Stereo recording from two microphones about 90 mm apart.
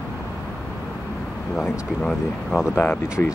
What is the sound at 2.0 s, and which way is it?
Speech, 10° left (ahead or behind).